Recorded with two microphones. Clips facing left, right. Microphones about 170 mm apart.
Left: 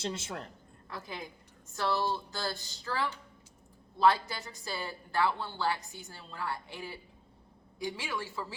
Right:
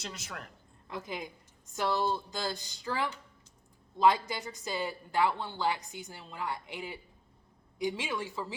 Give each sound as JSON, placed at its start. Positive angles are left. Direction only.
{"t": 0.0, "sound": "speech", "side_deg": 25}
{"t": 0.9, "sound": "a woman's voice", "side_deg": -20}